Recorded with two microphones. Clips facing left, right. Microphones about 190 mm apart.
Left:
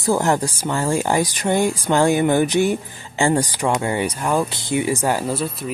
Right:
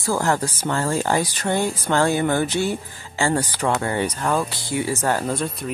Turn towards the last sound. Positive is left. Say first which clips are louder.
# left 1 dB
turn(degrees=5)  # may be behind; listen again after turning